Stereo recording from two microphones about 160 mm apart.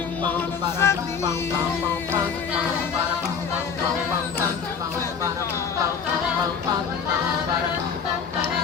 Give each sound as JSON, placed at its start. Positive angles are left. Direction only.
{"t": 0.8, "sound": "speech", "side_deg": 15}